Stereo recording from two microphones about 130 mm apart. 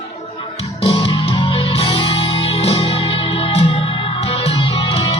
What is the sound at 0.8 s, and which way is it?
Music, 45° left (ahead or behind).